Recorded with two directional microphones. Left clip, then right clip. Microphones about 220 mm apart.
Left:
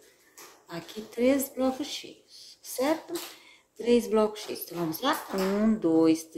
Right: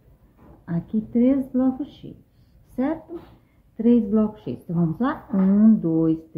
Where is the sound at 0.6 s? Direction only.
5° left (ahead or behind).